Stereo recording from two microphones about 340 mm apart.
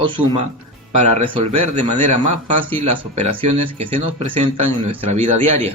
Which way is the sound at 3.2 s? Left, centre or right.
Centre.